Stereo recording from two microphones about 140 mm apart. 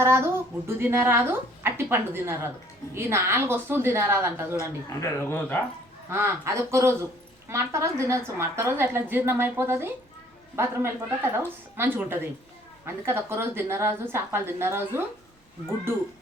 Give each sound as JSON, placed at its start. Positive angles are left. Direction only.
{"t": 0.0, "sound": "a woman's voice", "side_deg": -20}
{"t": 4.9, "sound": "speech", "side_deg": 15}
{"t": 6.1, "sound": "a woman's voice", "side_deg": -20}